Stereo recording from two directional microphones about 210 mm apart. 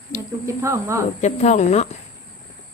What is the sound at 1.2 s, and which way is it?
Speech, 35° left (ahead or behind).